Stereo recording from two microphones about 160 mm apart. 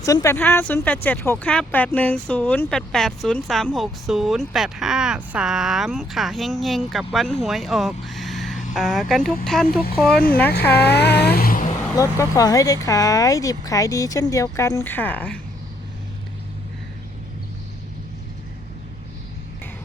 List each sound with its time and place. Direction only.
0.0 s speech: 20° left (ahead or behind); by 9.6 s 5° left (ahead or behind)
10.7 s vehicle: 90° left; by 11.7 s 60° left (ahead or behind)
11.9 s speech: 20° left (ahead or behind)